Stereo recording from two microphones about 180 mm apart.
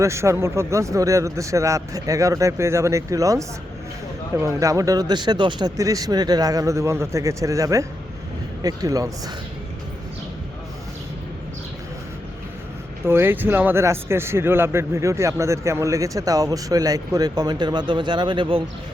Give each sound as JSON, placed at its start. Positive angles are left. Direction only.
{"t": 0.0, "sound": "speech", "side_deg": -15}
{"t": 13.1, "sound": "speech", "side_deg": -10}